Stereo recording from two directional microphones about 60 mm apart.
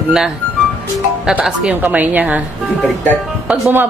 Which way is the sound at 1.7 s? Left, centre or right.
Right.